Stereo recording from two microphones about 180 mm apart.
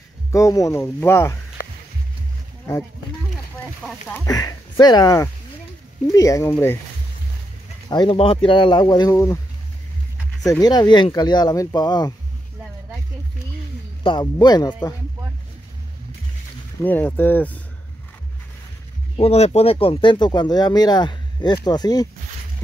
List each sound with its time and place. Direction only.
0.3 s speech: 15° left (ahead or behind)
4.3 s speech: 20° left (ahead or behind)
7.9 s speech: 25° left (ahead or behind)
10.4 s speech: 20° left (ahead or behind)
14.0 s speech: 25° left (ahead or behind)
16.8 s speech: 10° left (ahead or behind)
19.1 s speech: 35° left (ahead or behind)